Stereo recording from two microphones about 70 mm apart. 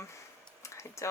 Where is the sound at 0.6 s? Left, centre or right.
Left.